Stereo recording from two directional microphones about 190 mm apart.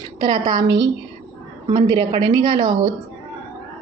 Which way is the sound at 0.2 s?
20° right (ahead or behind).